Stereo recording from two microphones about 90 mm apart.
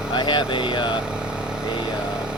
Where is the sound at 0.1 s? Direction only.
60° left (ahead or behind).